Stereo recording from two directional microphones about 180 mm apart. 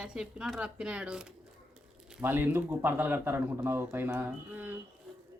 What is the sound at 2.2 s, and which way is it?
Speech, 10° right (ahead or behind).